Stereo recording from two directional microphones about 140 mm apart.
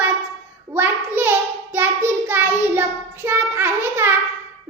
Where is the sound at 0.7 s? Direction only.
15° right (ahead or behind).